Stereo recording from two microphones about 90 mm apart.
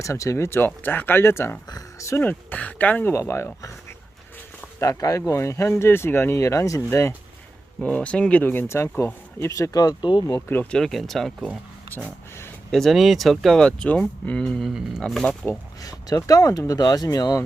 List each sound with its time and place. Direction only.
0.0 s speech: 35° left (ahead or behind)
2.2 s speech: 15° left (ahead or behind)
4.8 s speech: 40° left (ahead or behind)
7.8 s speech: 15° left (ahead or behind); by 9.6 s 30° left (ahead or behind)
9.7 s speech: 50° left (ahead or behind)
10.5 s speech: 20° left (ahead or behind)
10.8 s speech: 5° left (ahead or behind)
12.7 s speech: centre (ahead or behind)
14.7 s speech: 5° right (ahead or behind)
15.0 s speech: 5° left (ahead or behind)
15.8 s speech: 40° left (ahead or behind)